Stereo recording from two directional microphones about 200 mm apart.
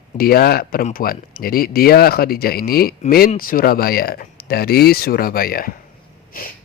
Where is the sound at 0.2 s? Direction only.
50° left (ahead or behind).